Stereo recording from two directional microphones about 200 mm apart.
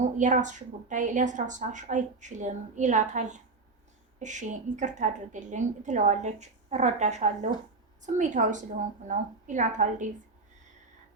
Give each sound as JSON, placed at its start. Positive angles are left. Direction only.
{"t": 0.2, "sound": "a woman's voice", "side_deg": -40}